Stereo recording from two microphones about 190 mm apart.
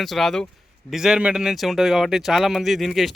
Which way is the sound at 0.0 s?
Centre (ahead or behind).